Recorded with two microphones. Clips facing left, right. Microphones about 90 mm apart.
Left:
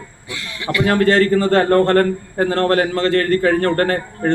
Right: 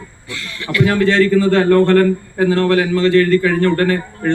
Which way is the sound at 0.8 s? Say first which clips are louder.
Right 1 dB; 50° left (ahead or behind).